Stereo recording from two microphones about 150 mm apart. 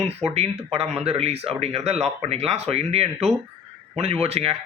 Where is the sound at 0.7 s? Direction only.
45° right (ahead or behind).